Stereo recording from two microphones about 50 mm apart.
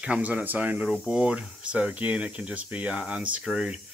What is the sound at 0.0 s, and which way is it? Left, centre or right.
Speech, right.